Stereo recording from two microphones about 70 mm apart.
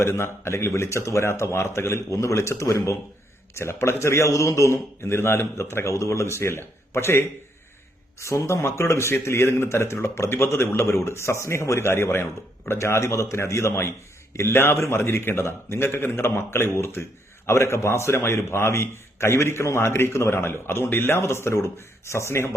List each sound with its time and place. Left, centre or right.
0.0 s a man's voice: left